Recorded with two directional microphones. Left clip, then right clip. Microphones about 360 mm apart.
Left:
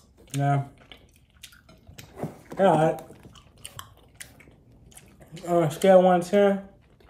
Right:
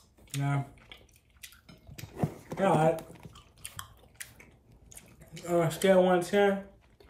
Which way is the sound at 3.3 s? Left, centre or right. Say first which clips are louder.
Left 3 dB; centre.